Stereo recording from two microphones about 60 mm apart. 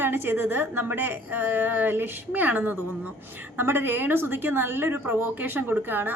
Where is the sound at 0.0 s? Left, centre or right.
Right.